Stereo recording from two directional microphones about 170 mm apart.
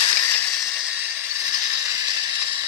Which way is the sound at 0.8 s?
5° right (ahead or behind).